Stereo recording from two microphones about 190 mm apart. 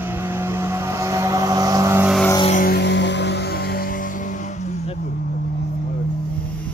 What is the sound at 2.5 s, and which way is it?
Music, 50° left (ahead or behind).